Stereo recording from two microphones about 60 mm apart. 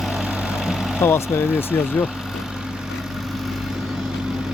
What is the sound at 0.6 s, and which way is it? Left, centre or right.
Vehicle, centre.